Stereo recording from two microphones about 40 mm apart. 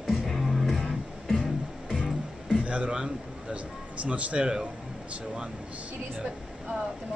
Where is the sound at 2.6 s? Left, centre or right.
Right.